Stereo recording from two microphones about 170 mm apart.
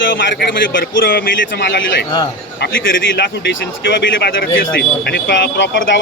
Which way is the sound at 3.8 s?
90° left.